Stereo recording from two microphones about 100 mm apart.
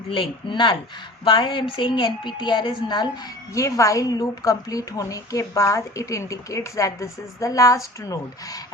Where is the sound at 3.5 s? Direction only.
30° left (ahead or behind).